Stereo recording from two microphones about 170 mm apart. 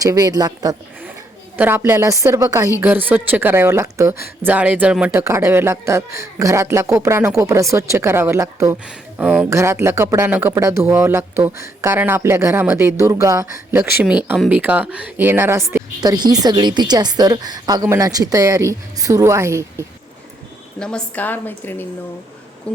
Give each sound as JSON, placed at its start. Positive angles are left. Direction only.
{"t": 0.0, "sound": "a woman's voice", "side_deg": -20}
{"t": 1.5, "sound": "speech", "side_deg": -10}
{"t": 16.0, "sound": "a woman's voice", "side_deg": -25}
{"t": 20.7, "sound": "a woman's voice", "side_deg": 5}